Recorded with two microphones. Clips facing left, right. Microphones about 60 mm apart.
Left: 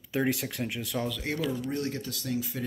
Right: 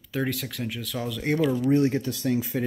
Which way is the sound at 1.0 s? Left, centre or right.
Centre.